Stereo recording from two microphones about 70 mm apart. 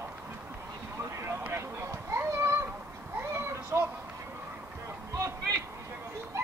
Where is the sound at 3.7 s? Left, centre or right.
Right.